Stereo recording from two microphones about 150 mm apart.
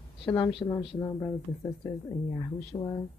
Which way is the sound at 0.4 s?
35° left (ahead or behind).